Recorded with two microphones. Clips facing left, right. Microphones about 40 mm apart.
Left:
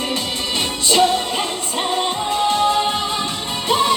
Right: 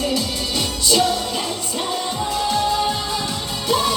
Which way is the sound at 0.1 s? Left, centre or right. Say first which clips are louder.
Even; left.